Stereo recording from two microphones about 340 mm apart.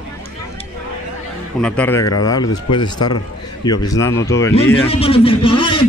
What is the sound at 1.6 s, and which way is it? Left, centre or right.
A man's voice, centre.